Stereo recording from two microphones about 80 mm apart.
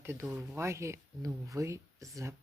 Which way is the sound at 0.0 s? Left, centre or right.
Right.